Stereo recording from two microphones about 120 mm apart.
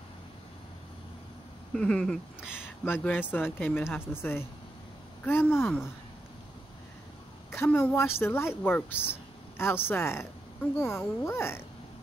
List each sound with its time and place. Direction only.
1.8 s speech: 5° left (ahead or behind)
2.4 s speech: 5° right (ahead or behind)
2.8 s speech: 15° left (ahead or behind)
5.2 s speech: 15° left (ahead or behind)
7.5 s speech: 20° left (ahead or behind)
8.9 s speech: 10° right (ahead or behind)
9.6 s speech: 20° left (ahead or behind)